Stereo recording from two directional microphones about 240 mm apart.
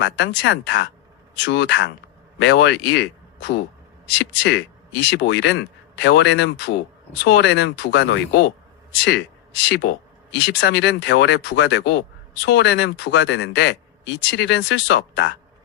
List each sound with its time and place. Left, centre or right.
0.0 s speech: left
9.6 s speech: left